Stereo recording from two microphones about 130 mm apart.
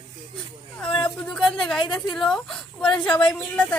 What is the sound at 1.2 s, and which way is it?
Speech, 5° left (ahead or behind).